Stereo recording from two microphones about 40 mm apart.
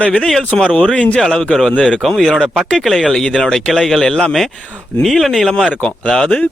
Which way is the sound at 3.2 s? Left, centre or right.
Centre.